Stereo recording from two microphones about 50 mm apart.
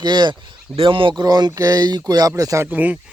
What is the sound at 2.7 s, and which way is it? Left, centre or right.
Speech, right.